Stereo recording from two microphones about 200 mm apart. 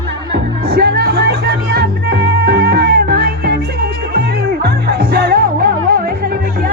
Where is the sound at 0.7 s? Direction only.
50° right (ahead or behind).